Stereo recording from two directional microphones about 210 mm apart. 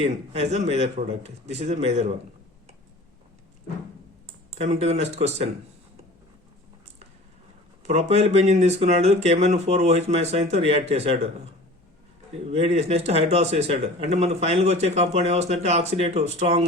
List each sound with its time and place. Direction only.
0.0 s speech: 30° right (ahead or behind)
4.5 s speech: 30° right (ahead or behind)
7.9 s speech: 30° right (ahead or behind)
12.5 s speech: 30° right (ahead or behind)